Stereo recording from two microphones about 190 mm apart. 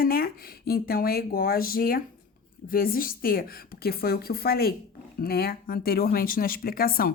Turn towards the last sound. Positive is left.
turn(degrees=50)  # may be behind; listen again after turning